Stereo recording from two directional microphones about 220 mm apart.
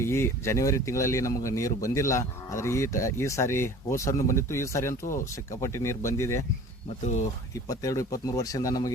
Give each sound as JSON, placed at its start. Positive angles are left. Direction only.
{"t": 0.0, "sound": "speech", "side_deg": 10}
{"t": 7.7, "sound": "speech", "side_deg": 15}